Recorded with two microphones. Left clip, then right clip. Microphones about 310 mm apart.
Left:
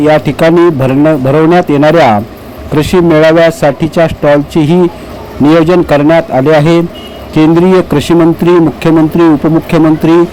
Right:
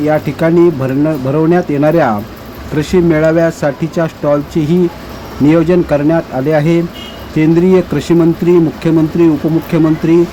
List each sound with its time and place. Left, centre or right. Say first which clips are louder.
0.0 s a man's voice: left 6 dB; centre